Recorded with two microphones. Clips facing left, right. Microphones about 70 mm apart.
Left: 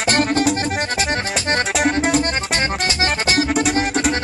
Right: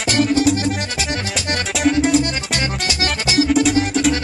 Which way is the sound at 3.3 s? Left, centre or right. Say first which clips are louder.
Right 5 dB; left.